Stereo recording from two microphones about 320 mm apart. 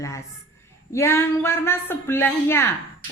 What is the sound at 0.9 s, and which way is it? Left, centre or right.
A woman's voice, centre.